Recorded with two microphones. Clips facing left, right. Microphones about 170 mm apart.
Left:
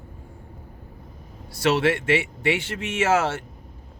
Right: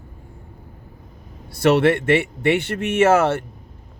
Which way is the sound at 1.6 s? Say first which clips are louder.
Right 5 dB; 55° right (ahead or behind).